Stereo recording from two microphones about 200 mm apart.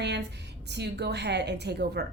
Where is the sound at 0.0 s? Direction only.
60° right (ahead or behind).